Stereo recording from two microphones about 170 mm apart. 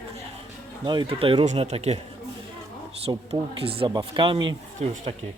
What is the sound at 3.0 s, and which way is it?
Speech, 35° right (ahead or behind).